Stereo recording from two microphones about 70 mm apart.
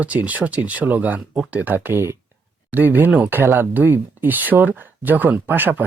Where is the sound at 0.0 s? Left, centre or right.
Right.